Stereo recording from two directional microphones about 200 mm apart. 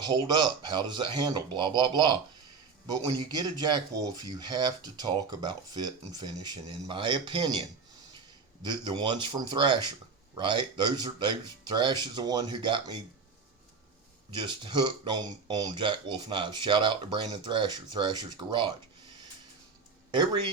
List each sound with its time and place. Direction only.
0.0 s speech: 20° right (ahead or behind)
14.3 s speech: 25° right (ahead or behind)
20.1 s speech: 25° right (ahead or behind)